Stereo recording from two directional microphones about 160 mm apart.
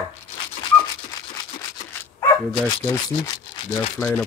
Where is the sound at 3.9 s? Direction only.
15° left (ahead or behind).